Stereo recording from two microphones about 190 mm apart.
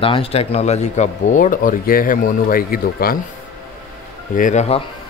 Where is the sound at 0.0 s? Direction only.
30° left (ahead or behind); by 3.2 s 50° left (ahead or behind).